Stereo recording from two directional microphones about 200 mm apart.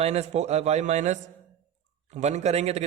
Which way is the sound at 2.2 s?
35° right (ahead or behind).